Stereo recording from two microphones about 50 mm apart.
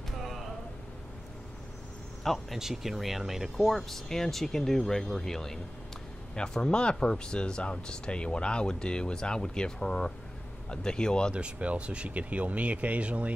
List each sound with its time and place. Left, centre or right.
2.2 s speech: centre
3.5 s speech: centre
11.3 s speech: right